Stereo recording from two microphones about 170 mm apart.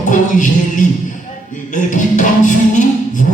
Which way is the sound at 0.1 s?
50° left (ahead or behind).